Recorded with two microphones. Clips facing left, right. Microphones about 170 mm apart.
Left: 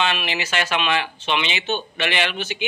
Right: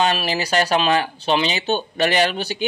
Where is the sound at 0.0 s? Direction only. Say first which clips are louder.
Right 4 dB; 40° right (ahead or behind).